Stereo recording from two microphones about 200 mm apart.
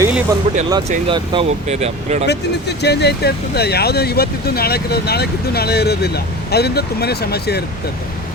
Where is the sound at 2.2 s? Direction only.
55° left (ahead or behind).